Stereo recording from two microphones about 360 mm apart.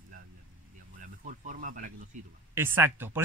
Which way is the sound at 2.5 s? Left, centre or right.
Centre.